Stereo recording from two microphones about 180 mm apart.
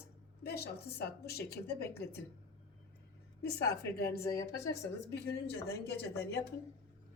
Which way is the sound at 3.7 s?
65° left (ahead or behind).